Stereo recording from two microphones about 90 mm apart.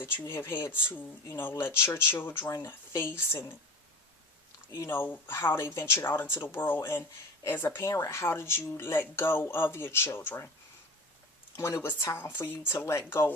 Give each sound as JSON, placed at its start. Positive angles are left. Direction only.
{"t": 0.3, "sound": "speech", "side_deg": 25}
{"t": 4.9, "sound": "speech", "side_deg": 20}
{"t": 11.5, "sound": "speech", "side_deg": 30}